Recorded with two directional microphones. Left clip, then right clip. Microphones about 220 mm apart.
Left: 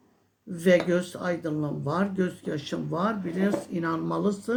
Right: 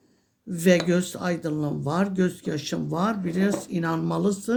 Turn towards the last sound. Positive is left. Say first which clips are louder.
# right 2 dB
turn(degrees=-40)  # may be behind; listen again after turning